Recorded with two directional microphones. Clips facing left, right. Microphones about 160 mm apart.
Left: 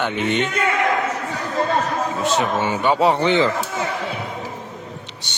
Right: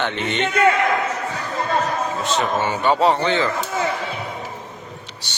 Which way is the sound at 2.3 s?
10° left (ahead or behind).